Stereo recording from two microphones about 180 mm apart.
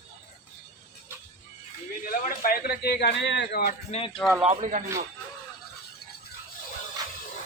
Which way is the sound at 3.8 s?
35° left (ahead or behind).